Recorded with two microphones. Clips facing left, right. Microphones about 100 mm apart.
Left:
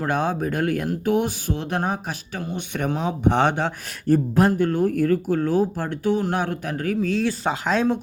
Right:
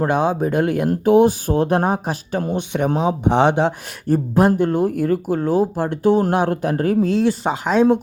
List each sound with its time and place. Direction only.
0.0 s speech: 20° right (ahead or behind)
1.5 s speech: 40° right (ahead or behind)
2.6 s speech: 20° right (ahead or behind)